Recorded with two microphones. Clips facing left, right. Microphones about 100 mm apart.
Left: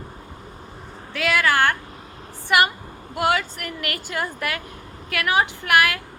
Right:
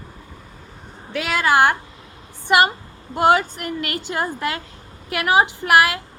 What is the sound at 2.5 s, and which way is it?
A woman's voice, 25° right (ahead or behind).